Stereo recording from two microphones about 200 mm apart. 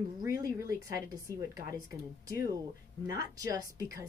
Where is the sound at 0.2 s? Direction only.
15° right (ahead or behind).